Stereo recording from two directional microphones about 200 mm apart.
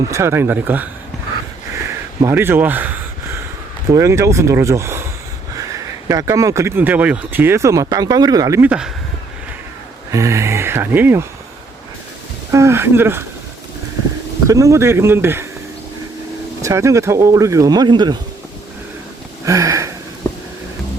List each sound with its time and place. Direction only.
0.1 s speech: 15° right (ahead or behind)
2.2 s speech: 10° right (ahead or behind)
10.1 s speech: 15° right (ahead or behind)
12.5 s speech: 15° right (ahead or behind)
14.4 s speech: 15° right (ahead or behind)
16.6 s speech: 15° right (ahead or behind)
19.5 s a sound: 15° right (ahead or behind)